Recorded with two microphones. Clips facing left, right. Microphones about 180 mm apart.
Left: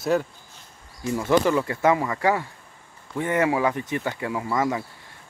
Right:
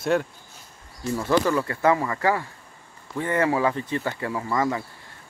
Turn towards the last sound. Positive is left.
turn(degrees=10)  # may be behind; listen again after turning